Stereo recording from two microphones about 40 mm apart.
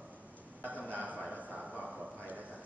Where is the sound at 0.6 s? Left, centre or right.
Right.